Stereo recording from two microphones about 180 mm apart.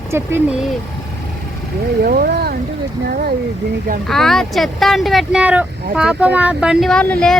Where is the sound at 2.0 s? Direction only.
55° right (ahead or behind).